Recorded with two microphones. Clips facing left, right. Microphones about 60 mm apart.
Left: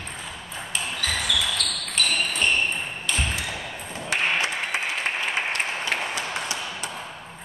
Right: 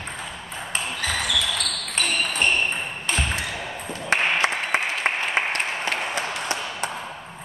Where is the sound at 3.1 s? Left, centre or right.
Right.